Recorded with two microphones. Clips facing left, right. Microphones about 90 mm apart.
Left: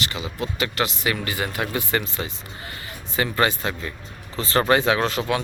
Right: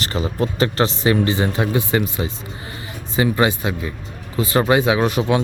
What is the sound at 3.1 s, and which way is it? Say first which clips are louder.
Speech: right 4 dB; 15° right (ahead or behind).